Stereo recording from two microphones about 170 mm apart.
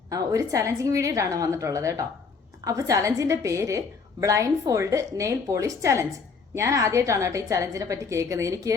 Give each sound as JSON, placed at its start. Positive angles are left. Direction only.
{"t": 0.1, "sound": "a woman's voice", "side_deg": -20}